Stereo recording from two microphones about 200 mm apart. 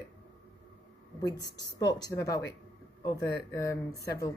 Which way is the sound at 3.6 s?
15° left (ahead or behind).